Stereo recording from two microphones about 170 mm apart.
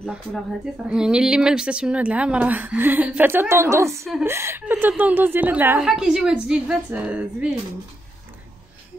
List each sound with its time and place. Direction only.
0.8 s a woman's voice: 5° right (ahead or behind)